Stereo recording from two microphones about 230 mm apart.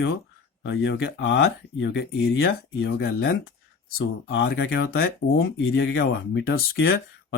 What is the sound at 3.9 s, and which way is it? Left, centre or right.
Speech, left.